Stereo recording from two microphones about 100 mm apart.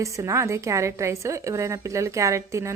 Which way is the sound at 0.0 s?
30° right (ahead or behind).